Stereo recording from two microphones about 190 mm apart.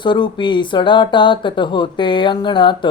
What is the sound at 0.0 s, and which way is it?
Speech, 25° left (ahead or behind).